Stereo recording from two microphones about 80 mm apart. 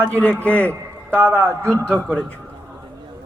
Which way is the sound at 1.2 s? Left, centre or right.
Right.